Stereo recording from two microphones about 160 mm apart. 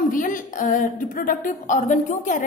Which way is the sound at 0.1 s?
55° left (ahead or behind).